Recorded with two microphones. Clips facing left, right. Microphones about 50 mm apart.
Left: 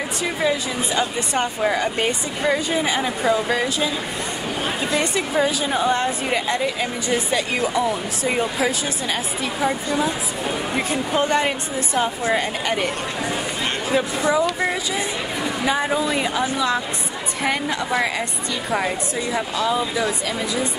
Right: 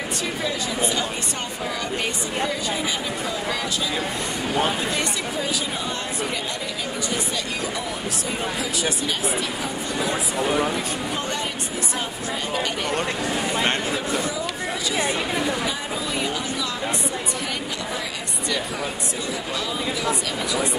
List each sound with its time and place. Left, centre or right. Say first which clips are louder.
0.9 s speech: left 5 dB; left
2.8 s speech: left 5 dB; left
5.1 s a woman's voice: left 6 dB; left
13.9 s speech: left 6 dB; left
15.6 s a woman's voice: left 7 dB; left
16.3 s speech: left 6 dB; left